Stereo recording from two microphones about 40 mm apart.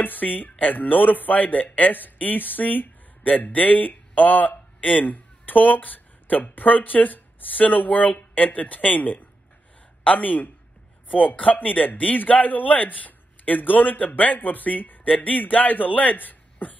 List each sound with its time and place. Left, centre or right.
0.0 s speech: left